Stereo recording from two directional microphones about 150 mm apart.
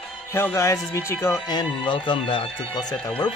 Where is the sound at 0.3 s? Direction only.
15° left (ahead or behind); by 2.4 s 35° left (ahead or behind).